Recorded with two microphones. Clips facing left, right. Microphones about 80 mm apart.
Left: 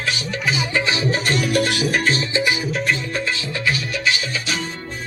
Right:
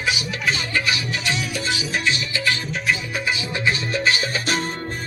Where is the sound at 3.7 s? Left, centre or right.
Right.